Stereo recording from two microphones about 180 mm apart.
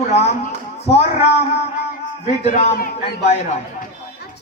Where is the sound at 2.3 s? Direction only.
45° left (ahead or behind).